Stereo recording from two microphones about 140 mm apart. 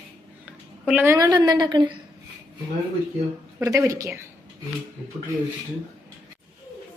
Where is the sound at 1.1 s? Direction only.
25° right (ahead or behind).